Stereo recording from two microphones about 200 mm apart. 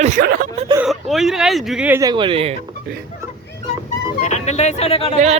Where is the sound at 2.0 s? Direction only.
20° right (ahead or behind).